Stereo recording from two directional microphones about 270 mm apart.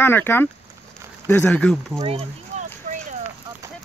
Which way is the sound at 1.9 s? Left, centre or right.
Right.